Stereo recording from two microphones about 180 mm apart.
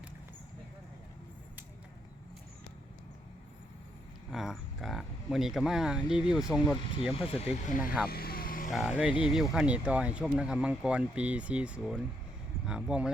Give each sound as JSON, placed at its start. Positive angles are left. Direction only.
{"t": 4.3, "sound": "speech", "side_deg": 0}
{"t": 7.3, "sound": "speech", "side_deg": 35}
{"t": 8.1, "sound": "vehicle", "side_deg": 55}
{"t": 8.7, "sound": "speech", "side_deg": -5}